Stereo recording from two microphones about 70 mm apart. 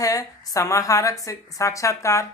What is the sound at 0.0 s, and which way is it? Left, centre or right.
A woman's voice, left.